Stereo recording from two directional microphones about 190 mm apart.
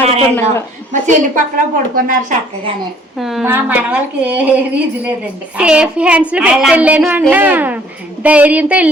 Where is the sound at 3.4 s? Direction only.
10° right (ahead or behind).